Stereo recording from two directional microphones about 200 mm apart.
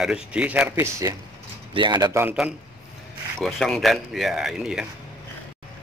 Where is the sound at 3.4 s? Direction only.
Centre (ahead or behind).